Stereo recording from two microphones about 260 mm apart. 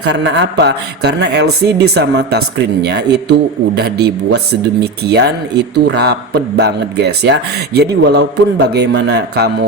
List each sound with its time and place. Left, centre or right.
0.0 s speech: right